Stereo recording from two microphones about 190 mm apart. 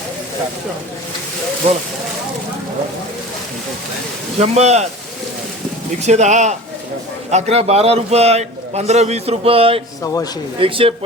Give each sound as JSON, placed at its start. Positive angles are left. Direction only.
{"t": 4.4, "sound": "a man's voice", "side_deg": -35}
{"t": 6.0, "sound": "a man's voice", "side_deg": -35}